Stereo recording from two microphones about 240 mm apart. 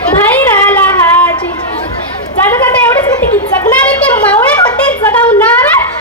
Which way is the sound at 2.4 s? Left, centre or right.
Centre.